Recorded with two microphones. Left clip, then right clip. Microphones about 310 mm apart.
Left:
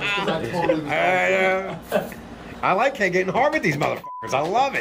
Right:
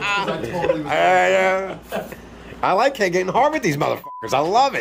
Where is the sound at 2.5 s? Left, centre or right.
Centre.